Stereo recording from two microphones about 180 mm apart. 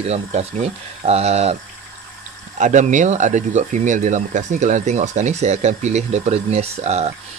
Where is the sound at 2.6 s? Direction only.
40° right (ahead or behind).